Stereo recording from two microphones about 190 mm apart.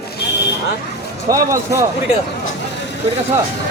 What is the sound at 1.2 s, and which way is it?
Speech, 15° right (ahead or behind).